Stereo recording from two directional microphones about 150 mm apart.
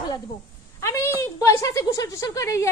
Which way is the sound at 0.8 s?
15° left (ahead or behind).